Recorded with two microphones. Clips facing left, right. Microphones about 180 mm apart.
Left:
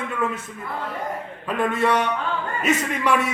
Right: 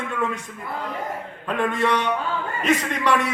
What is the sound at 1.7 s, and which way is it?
A man's voice, 10° left (ahead or behind).